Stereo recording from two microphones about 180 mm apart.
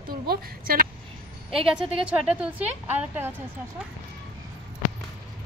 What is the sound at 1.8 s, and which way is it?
A woman's voice, 5° right (ahead or behind).